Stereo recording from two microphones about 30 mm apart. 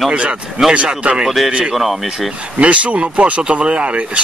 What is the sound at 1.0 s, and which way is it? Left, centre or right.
Speech, right.